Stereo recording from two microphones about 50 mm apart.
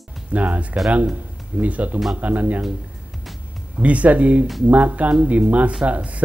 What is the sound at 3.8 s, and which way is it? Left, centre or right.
Speech, right.